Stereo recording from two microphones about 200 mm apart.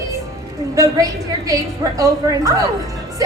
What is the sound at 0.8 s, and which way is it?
A woman's voice, 15° right (ahead or behind).